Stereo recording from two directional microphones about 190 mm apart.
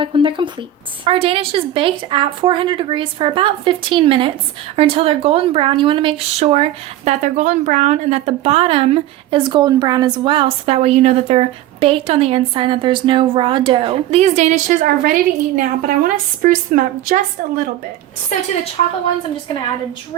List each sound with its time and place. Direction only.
0.0 s a woman's voice: 25° right (ahead or behind); by 17.2 s 45° right (ahead or behind)
18.8 s a woman's voice: 35° left (ahead or behind)